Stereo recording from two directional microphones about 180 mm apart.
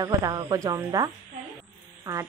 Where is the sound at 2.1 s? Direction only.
15° right (ahead or behind).